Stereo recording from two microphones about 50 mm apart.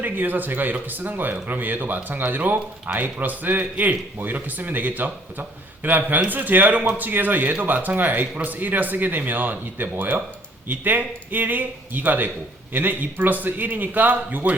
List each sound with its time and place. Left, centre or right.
0.0 s a man's voice: right